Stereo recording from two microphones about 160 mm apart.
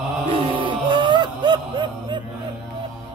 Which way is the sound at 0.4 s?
35° right (ahead or behind).